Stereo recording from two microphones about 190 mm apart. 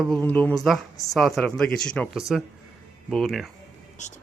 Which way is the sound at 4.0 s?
40° left (ahead or behind).